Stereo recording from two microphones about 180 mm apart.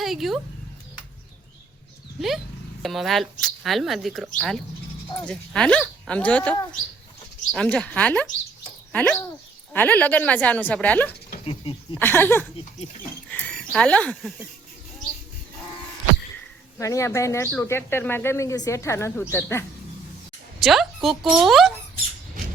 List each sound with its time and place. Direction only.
0.0 s speech: centre (ahead or behind)
2.8 s speech: centre (ahead or behind)
11.4 s speech: 30° left (ahead or behind)
11.9 s speech: 10° left (ahead or behind)
13.2 s rodents: 5° left (ahead or behind)
16.7 s speech: 15° left (ahead or behind)
20.6 s speech: centre (ahead or behind)